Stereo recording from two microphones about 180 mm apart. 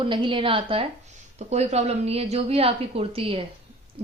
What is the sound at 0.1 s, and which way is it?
A woman's voice, 30° right (ahead or behind).